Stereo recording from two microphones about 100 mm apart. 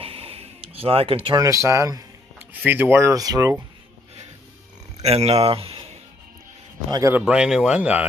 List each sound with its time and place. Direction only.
0.0 s a sound: 75° right (ahead or behind)
1.3 s speech: 35° right (ahead or behind)
2.3 s speech: 20° right (ahead or behind); by 3.5 s 35° right (ahead or behind)
4.9 s speech: 90° right; by 5.9 s 70° right (ahead or behind)
6.9 s speech: 35° right (ahead or behind)
7.2 s speech: 10° right (ahead or behind)